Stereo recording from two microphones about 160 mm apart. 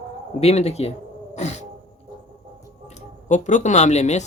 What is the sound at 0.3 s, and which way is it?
Speech, 40° left (ahead or behind).